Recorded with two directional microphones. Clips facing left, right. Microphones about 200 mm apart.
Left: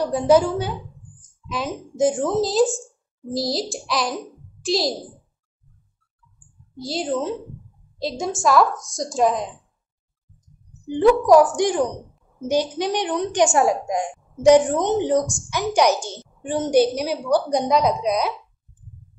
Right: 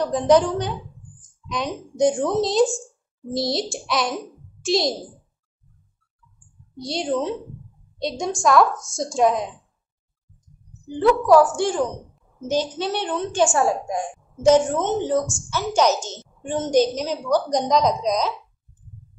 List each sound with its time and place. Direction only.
0.0 s a woman's voice: 10° left (ahead or behind)
6.8 s a woman's voice: centre (ahead or behind)
11.0 s a woman's voice: 15° left (ahead or behind)